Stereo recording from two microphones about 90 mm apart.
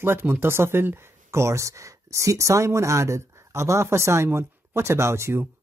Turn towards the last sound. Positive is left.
turn(degrees=-30)  # may be behind; listen again after turning